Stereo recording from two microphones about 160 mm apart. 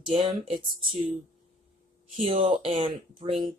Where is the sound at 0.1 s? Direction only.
35° right (ahead or behind).